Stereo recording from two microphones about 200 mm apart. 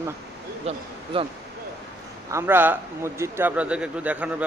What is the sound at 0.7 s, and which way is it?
Speech, 30° right (ahead or behind).